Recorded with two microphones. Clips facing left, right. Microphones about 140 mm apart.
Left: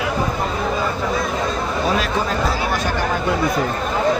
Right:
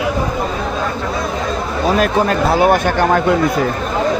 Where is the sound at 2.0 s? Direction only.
60° right (ahead or behind).